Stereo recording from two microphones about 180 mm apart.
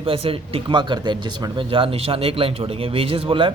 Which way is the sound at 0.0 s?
30° right (ahead or behind).